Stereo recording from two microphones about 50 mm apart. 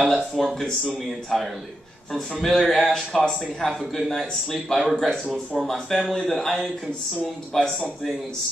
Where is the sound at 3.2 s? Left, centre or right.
Centre.